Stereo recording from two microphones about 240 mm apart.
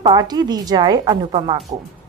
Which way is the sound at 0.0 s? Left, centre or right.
Centre.